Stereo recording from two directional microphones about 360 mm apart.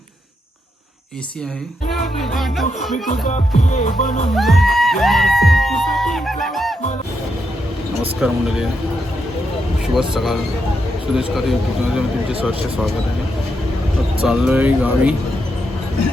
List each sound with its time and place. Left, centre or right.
2.3 s speech: centre
2.9 s speech: centre
4.4 s speech: centre
8.2 s speech: centre
9.8 s speech: centre
11.9 s speech: centre
14.2 s speech: centre